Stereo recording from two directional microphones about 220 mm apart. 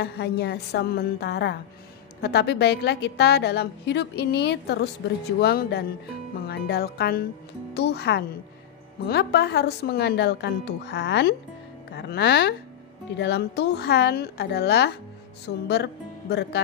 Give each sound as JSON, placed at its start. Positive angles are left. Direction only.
{"t": 0.0, "sound": "a woman's voice", "side_deg": 50}